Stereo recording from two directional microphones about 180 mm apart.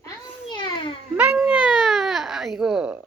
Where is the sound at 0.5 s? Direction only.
25° left (ahead or behind).